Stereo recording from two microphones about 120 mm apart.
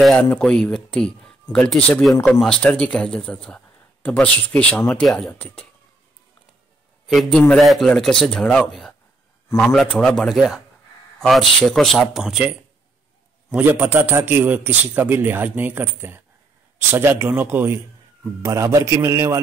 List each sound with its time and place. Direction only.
0.0 s speech: 10° left (ahead or behind)
7.1 s a man's voice: centre (ahead or behind); by 19.4 s 25° right (ahead or behind)